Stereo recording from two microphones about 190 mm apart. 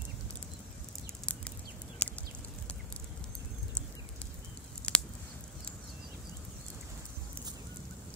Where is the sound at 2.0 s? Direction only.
5° left (ahead or behind).